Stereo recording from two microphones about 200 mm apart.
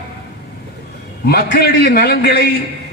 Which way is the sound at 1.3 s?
55° left (ahead or behind).